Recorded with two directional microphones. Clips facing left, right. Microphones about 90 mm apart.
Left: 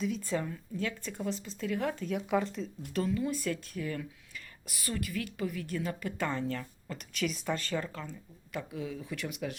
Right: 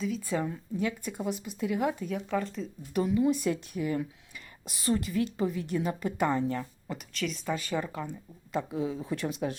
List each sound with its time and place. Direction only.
0.2 s speech: 10° right (ahead or behind)
2.0 s speech: centre (ahead or behind)
2.9 s a woman's voice: 15° right (ahead or behind)
7.1 s speech: 5° left (ahead or behind)
7.6 s speech: 15° right (ahead or behind)
8.5 s a woman's voice: 25° right (ahead or behind)